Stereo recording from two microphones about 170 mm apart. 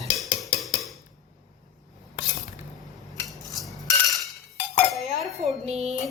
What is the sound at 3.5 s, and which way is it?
Cutlery, centre (ahead or behind).